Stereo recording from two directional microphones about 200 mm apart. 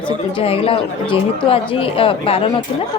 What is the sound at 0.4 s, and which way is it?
Speech, 30° left (ahead or behind).